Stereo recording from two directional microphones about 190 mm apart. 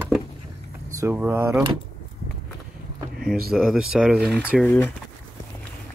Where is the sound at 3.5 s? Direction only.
Centre (ahead or behind).